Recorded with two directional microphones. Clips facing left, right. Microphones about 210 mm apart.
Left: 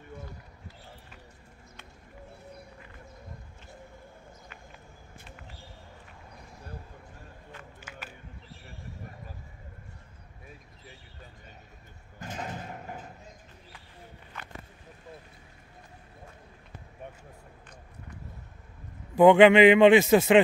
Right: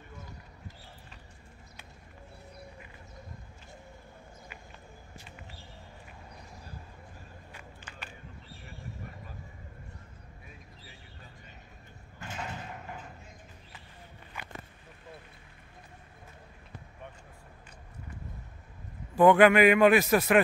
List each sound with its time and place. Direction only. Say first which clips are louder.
12.2 s a sound: left 3 dB; 40° left (ahead or behind)
14.3 s walk: even; 10° right (ahead or behind)
19.1 s a man's voice: left 3 dB; 20° left (ahead or behind)